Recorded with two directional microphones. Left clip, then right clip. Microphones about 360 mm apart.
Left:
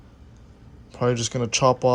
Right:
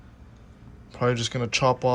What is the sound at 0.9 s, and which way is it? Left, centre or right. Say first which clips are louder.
Speech: left 1 dB; centre.